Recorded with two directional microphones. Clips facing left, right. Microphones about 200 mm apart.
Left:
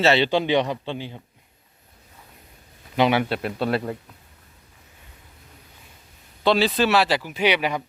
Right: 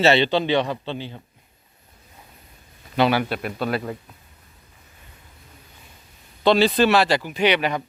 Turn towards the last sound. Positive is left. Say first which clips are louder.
# right 2 dB
turn(degrees=10)  # may be behind; listen again after turning